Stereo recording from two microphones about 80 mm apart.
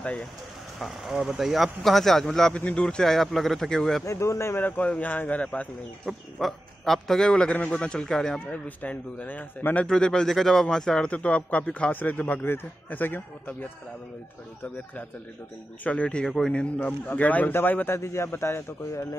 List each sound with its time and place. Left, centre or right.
0.7 s speech: centre
4.0 s a man's voice: left
4.6 s a man's voice: centre
6.0 s a man's voice: centre
8.5 s a man's voice: left
9.8 s a man's voice: centre
15.8 s a man's voice: centre; by 19.0 s left